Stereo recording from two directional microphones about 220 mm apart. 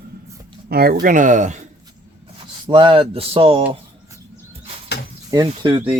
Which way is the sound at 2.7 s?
20° right (ahead or behind).